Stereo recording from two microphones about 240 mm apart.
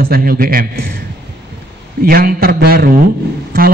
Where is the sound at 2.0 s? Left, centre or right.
Right.